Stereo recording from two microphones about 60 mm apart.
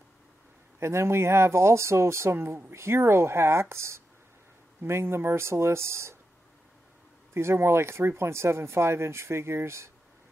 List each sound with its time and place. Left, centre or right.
0.7 s speech: right
7.3 s speech: right